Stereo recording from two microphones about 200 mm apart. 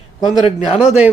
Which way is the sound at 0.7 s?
5° right (ahead or behind).